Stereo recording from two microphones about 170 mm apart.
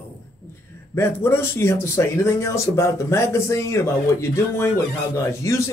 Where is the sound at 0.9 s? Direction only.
15° left (ahead or behind).